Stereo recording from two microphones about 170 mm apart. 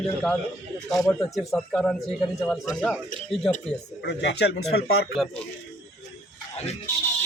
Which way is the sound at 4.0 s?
75° left (ahead or behind).